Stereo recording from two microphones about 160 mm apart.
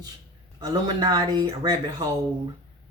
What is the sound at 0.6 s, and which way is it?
Speech, 25° right (ahead or behind).